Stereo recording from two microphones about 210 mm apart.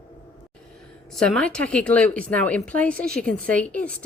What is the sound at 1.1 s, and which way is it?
A woman's voice, 5° left (ahead or behind).